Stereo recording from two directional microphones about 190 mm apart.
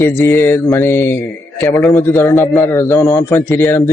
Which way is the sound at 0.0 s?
15° left (ahead or behind).